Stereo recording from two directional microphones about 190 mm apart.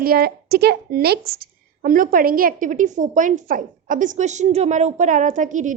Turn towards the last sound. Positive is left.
turn(degrees=-40)  # may be behind; listen again after turning